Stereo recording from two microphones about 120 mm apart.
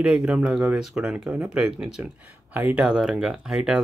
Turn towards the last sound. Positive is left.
turn(degrees=-5)  # may be behind; listen again after turning